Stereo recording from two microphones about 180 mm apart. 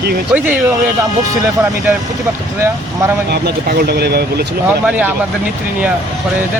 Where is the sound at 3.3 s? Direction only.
60° right (ahead or behind).